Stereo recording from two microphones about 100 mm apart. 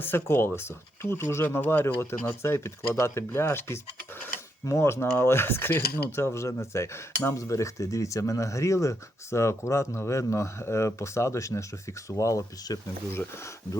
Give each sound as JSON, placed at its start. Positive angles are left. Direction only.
{"t": 0.0, "sound": "speech", "side_deg": 20}
{"t": 13.1, "sound": "speech", "side_deg": 25}